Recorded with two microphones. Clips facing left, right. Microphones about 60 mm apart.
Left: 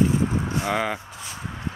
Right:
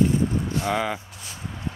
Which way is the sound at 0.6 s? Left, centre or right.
Centre.